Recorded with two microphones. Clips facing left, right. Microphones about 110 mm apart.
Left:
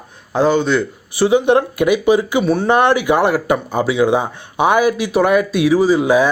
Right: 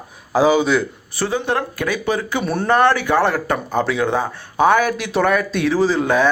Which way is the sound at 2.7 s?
15° left (ahead or behind).